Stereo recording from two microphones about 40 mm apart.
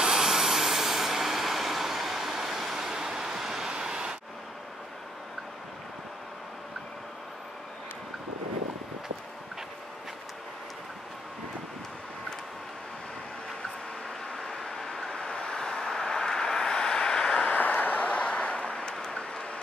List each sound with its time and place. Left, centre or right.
0.0 s vehicle: centre
14.3 s vehicle: centre; by 17.6 s left
17.6 s a sound: left
18.2 s vehicle: left